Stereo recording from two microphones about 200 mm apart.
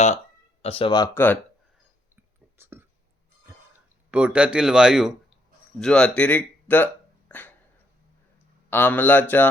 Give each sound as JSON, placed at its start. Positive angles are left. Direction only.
{"t": 0.6, "sound": "speech", "side_deg": 30}
{"t": 2.6, "sound": "whispering", "side_deg": -10}
{"t": 4.1, "sound": "a man's voice", "side_deg": -5}
{"t": 8.7, "sound": "speech", "side_deg": 10}